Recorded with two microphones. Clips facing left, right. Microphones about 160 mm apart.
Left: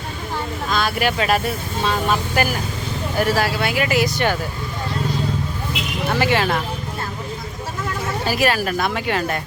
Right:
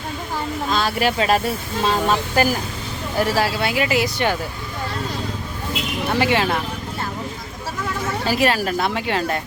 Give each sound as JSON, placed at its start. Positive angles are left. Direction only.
{"t": 0.7, "sound": "speech", "side_deg": -30}
{"t": 6.1, "sound": "speech", "side_deg": -20}
{"t": 8.3, "sound": "speech", "side_deg": -25}